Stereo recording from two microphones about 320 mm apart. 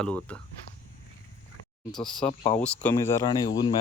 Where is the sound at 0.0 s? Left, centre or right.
Centre.